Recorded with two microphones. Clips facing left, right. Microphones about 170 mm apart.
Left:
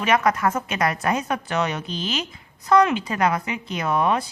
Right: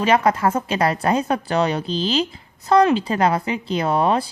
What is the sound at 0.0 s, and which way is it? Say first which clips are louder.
A woman's voice: right 3 dB; 30° right (ahead or behind).